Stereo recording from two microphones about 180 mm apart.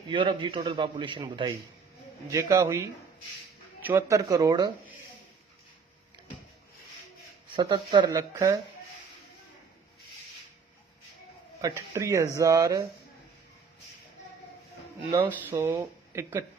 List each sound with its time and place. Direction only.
0.1 s a man's voice: 25° right (ahead or behind)
3.8 s a man's voice: 15° right (ahead or behind)
7.5 s a man's voice: 25° right (ahead or behind)
11.6 s a man's voice: 15° right (ahead or behind)
15.4 s speech: 15° right (ahead or behind)